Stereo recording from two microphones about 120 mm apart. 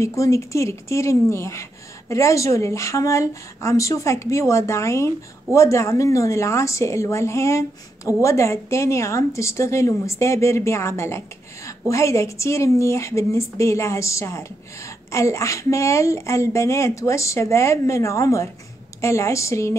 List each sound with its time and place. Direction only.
0.0 s speech: 25° left (ahead or behind)